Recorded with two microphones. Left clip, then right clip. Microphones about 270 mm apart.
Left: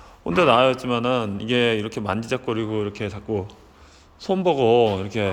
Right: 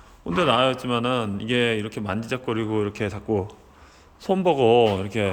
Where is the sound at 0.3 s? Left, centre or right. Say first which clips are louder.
Left 4 dB; centre.